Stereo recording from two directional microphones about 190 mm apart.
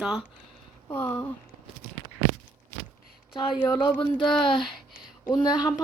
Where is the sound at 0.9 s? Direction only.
10° left (ahead or behind).